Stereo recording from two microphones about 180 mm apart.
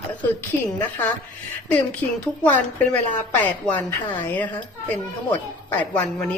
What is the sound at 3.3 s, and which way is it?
Speech, 10° left (ahead or behind).